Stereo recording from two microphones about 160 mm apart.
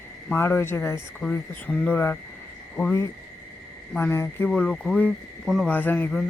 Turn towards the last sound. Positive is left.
turn(degrees=10)  # may be behind; listen again after turning